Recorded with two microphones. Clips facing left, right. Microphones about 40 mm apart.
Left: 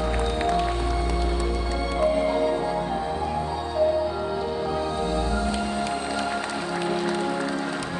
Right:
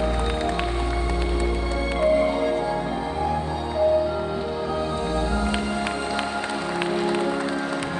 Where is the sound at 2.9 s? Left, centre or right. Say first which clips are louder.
Right 1 dB; centre.